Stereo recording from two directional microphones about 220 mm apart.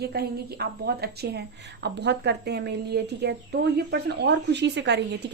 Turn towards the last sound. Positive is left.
turn(degrees=-50)  # may be behind; listen again after turning